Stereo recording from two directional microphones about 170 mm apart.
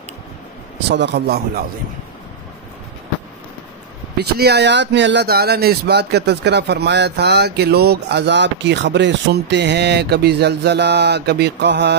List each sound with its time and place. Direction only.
0.8 s a man's voice: 90° right
4.2 s speech: 75° right (ahead or behind)